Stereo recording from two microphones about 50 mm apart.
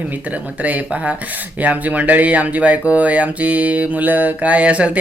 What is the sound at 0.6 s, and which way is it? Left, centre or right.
Speech, right.